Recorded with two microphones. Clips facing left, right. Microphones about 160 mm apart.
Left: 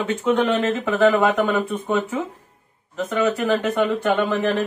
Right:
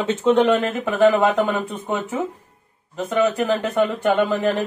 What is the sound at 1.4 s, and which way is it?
Speech, 20° right (ahead or behind).